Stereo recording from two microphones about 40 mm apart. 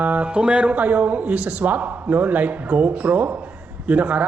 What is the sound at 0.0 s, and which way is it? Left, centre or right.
Music, right.